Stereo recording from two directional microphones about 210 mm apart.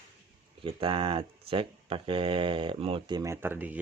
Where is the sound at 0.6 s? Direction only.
25° right (ahead or behind).